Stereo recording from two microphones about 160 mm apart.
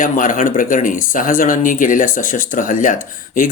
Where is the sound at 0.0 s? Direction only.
60° left (ahead or behind).